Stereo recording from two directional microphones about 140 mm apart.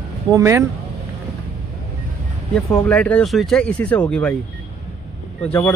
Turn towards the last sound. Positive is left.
turn(degrees=10)  # may be behind; listen again after turning